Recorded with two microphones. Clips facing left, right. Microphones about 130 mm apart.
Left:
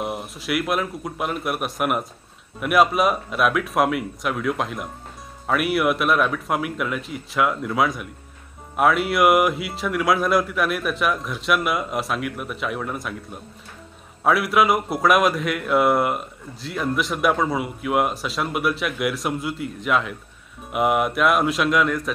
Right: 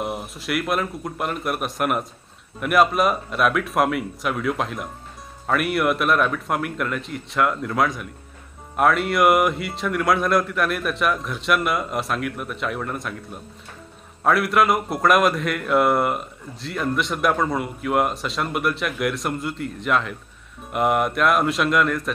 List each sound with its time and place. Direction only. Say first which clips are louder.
0.0 s speech: even; centre (ahead or behind)
14.2 s speech: even; centre (ahead or behind)